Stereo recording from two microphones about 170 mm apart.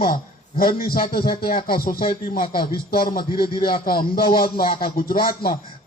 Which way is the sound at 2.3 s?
30° left (ahead or behind).